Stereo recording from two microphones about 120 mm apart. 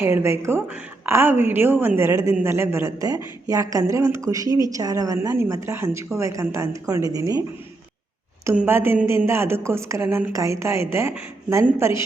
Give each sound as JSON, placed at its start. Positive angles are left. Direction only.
{"t": 0.0, "sound": "a woman's voice", "side_deg": -20}
{"t": 8.5, "sound": "a woman's voice", "side_deg": -20}